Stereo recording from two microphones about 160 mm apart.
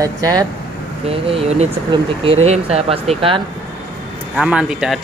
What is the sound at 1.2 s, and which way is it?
Speech, 35° right (ahead or behind).